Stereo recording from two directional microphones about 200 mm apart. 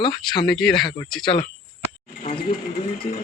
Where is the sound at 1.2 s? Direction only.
25° left (ahead or behind).